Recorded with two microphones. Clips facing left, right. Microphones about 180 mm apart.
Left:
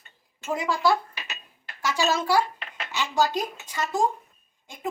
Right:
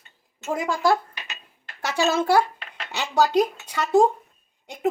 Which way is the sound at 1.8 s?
55° right (ahead or behind).